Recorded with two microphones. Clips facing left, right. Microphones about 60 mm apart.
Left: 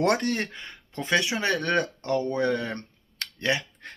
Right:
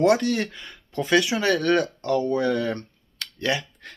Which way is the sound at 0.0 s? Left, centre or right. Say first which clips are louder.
Right 4 dB; left.